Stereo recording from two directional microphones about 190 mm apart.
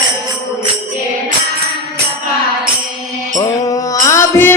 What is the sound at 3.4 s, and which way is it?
Mantra, 20° left (ahead or behind).